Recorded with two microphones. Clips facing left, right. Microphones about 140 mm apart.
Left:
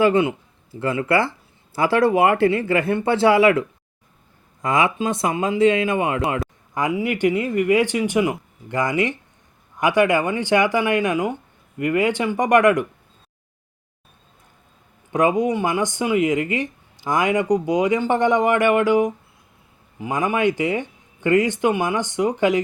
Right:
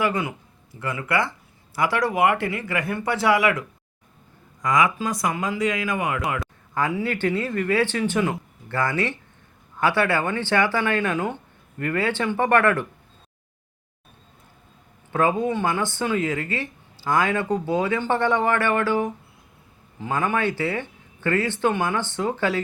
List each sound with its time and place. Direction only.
0.0 s speech: 25° left (ahead or behind)
6.7 s speech: 15° left (ahead or behind)
15.1 s speech: 15° left (ahead or behind)